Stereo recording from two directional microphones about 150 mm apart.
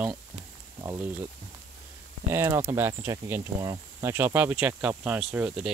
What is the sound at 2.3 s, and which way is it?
Speech, 15° right (ahead or behind).